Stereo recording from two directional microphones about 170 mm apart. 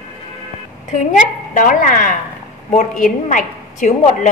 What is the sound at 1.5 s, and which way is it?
A woman's voice, 50° left (ahead or behind).